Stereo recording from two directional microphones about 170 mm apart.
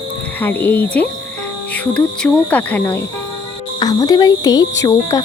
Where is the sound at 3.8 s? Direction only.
25° left (ahead or behind).